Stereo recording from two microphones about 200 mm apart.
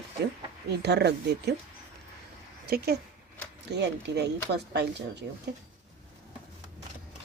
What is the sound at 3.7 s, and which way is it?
Speech, 60° right (ahead or behind).